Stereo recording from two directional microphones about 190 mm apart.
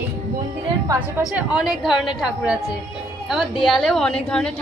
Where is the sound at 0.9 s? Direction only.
5° right (ahead or behind).